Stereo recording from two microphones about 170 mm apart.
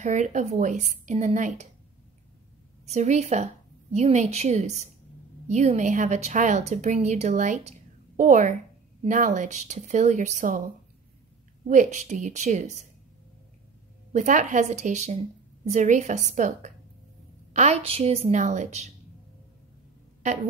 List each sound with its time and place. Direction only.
0.0 s a woman's voice: 45° right (ahead or behind)
2.8 s a woman's voice: 40° right (ahead or behind)
11.6 s a woman's voice: 45° right (ahead or behind)
14.1 s a woman's voice: 45° right (ahead or behind)